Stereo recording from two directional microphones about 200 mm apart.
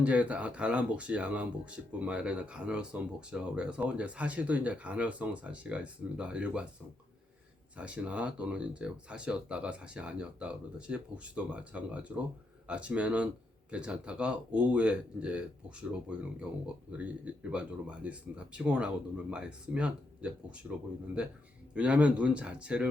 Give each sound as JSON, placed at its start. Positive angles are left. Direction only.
{"t": 0.0, "sound": "speech", "side_deg": -5}
{"t": 7.8, "sound": "speech", "side_deg": -5}
{"t": 21.8, "sound": "speech", "side_deg": -5}